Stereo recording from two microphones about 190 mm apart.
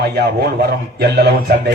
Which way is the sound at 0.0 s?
55° right (ahead or behind).